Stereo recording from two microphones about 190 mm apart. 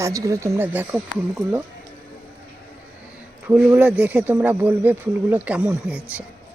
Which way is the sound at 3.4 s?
5° right (ahead or behind).